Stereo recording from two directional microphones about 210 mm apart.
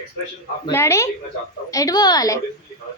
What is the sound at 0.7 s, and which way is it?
A woman's voice, 15° left (ahead or behind).